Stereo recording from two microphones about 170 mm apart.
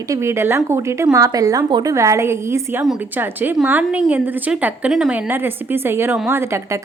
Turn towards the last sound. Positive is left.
turn(degrees=-15)  # may be behind; listen again after turning